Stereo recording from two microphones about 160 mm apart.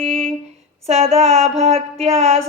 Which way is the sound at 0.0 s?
40° right (ahead or behind).